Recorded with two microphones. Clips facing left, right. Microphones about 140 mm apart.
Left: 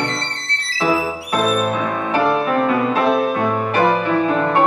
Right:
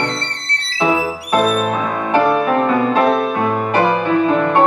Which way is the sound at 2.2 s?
Centre (ahead or behind).